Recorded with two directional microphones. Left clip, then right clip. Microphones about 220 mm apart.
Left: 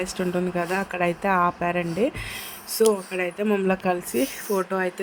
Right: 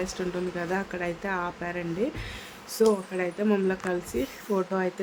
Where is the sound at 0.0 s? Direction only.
25° left (ahead or behind).